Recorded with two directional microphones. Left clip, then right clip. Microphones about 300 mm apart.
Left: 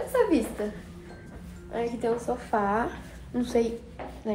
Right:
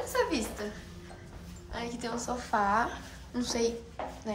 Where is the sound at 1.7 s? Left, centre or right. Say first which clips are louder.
Left 8 dB; centre.